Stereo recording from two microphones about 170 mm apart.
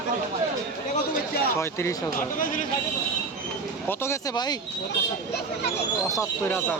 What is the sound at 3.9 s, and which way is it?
Speech, 15° left (ahead or behind).